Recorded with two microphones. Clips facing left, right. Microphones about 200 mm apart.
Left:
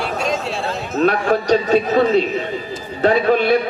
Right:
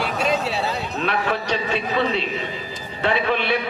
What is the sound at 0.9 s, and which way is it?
A man's voice, 40° left (ahead or behind).